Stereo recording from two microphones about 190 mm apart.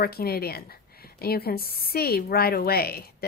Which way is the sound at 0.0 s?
55° left (ahead or behind).